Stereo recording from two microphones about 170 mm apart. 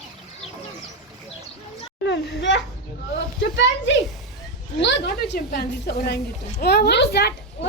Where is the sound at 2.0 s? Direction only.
90° left.